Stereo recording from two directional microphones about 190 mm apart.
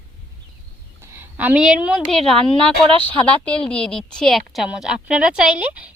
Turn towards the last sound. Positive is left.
turn(degrees=-5)  # may be behind; listen again after turning